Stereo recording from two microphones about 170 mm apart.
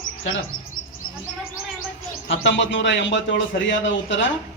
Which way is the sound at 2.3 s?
90° left.